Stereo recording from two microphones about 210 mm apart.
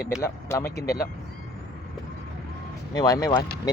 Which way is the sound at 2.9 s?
20° left (ahead or behind).